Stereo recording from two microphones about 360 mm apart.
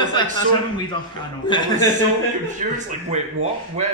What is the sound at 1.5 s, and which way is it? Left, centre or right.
Speech, centre.